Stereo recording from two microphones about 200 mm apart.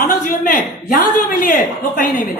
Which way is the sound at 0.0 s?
45° left (ahead or behind).